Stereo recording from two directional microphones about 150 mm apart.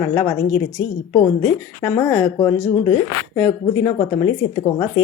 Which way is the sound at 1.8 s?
20° left (ahead or behind).